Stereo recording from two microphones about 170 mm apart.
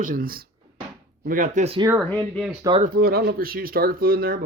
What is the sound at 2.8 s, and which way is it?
Speech, 60° right (ahead or behind).